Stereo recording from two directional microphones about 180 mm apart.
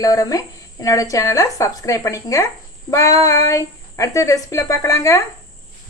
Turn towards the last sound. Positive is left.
turn(degrees=15)  # may be behind; listen again after turning